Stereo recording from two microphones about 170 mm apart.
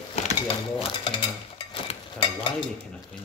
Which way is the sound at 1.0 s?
25° left (ahead or behind).